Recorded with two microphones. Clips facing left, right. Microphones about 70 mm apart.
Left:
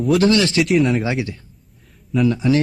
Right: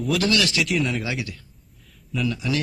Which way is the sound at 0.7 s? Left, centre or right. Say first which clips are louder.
Left 8 dB; centre.